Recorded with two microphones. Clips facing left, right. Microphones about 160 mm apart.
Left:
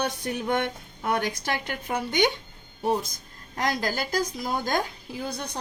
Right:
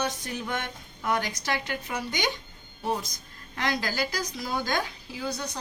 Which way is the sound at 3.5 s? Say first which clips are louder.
Left 2 dB; 45° left (ahead or behind).